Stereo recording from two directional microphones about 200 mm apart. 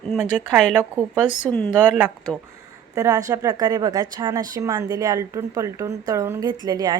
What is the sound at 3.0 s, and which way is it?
A woman's voice, 15° right (ahead or behind).